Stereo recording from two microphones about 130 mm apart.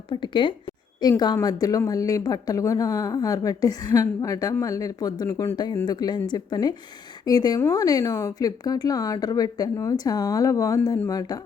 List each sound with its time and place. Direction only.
0.1 s speech: 40° left (ahead or behind)